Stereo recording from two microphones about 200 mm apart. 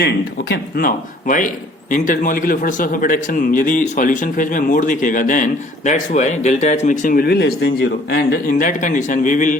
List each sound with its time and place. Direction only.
0.5 s a man's voice: 45° left (ahead or behind)